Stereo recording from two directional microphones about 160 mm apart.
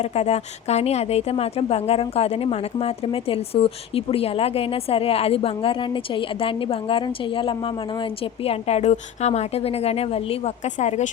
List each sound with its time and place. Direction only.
0.0 s a woman's voice: 40° left (ahead or behind)